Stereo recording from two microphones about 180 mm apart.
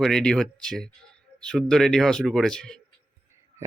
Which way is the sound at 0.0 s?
5° left (ahead or behind).